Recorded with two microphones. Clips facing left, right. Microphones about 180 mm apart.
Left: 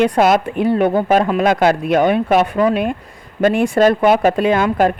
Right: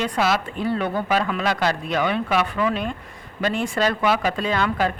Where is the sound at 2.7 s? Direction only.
55° left (ahead or behind).